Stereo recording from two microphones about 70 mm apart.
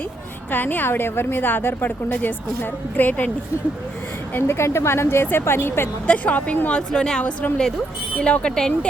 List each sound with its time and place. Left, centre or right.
0.5 s a woman's voice: left
4.4 s a woman's voice: left
6.1 s a woman's voice: centre